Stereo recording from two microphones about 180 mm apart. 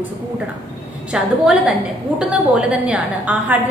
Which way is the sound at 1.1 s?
5° right (ahead or behind).